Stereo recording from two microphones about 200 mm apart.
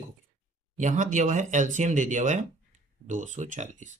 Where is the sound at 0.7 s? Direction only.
40° right (ahead or behind).